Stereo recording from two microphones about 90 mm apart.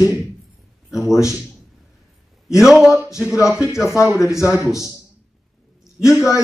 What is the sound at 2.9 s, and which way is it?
Speech, 35° left (ahead or behind).